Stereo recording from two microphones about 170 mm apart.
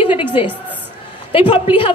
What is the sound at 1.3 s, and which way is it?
Speech, 35° left (ahead or behind).